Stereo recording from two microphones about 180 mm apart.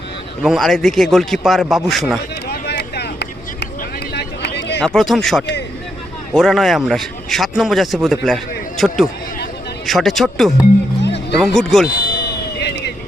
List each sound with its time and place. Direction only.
0.4 s speech: centre (ahead or behind)
2.5 s vehicle: 65° left (ahead or behind)
4.1 s a sound: 65° left (ahead or behind)
4.8 s speech: centre (ahead or behind)
11.0 s music: 75° left (ahead or behind)
11.3 s speech: centre (ahead or behind)
12.5 s vehicle: 70° left (ahead or behind)